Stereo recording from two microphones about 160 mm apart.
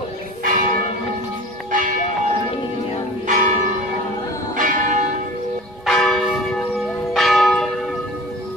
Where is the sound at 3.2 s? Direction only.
50° right (ahead or behind).